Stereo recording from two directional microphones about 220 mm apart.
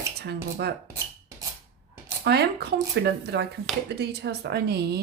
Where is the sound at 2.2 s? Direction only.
45° right (ahead or behind).